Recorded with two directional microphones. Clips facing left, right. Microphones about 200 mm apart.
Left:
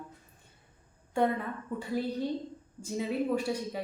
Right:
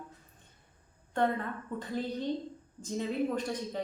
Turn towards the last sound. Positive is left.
turn(degrees=10)  # may be behind; listen again after turning